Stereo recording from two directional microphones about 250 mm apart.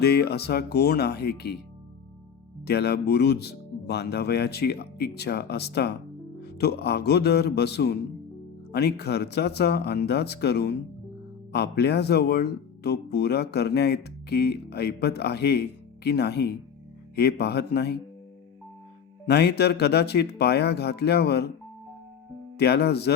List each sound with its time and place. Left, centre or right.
0.0 s speech: left
2.6 s speech: left
19.2 s speech: left
22.5 s speech: left